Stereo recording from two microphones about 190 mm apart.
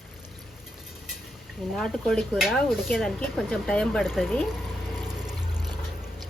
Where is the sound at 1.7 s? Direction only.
Centre (ahead or behind).